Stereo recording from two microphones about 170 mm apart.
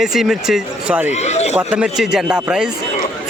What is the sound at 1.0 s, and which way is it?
Speech, 40° left (ahead or behind).